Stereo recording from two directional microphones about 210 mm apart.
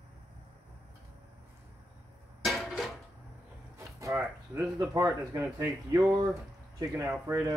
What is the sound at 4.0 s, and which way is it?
Speech, 15° right (ahead or behind).